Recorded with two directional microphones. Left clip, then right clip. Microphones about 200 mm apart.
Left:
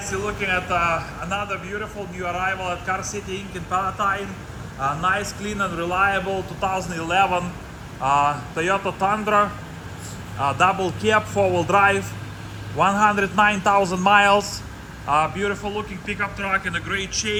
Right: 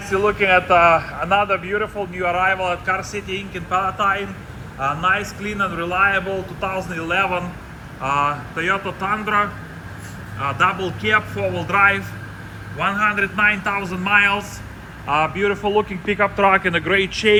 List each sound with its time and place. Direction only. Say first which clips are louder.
0.1 s a man's voice: right 8 dB; 5° left (ahead or behind)
15.0 s a man's voice: right 2 dB; centre (ahead or behind)
16.4 s speech: right 9 dB; 25° right (ahead or behind)